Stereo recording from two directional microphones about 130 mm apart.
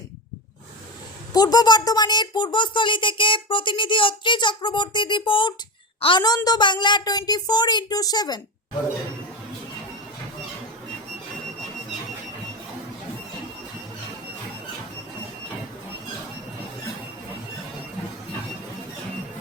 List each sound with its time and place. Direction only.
1.3 s speech: 30° left (ahead or behind)